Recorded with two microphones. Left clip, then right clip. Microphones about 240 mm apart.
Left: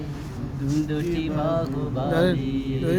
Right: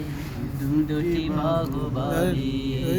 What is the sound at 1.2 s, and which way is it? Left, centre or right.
Mantra, centre.